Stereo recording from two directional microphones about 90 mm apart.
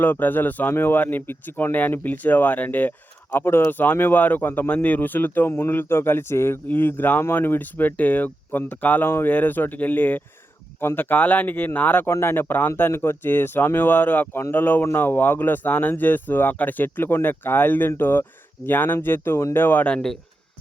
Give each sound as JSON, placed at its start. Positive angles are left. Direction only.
{"t": 0.0, "sound": "speech", "side_deg": 20}